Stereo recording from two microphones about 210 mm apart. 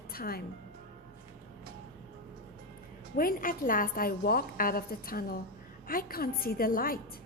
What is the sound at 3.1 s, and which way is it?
A woman's voice, 45° left (ahead or behind).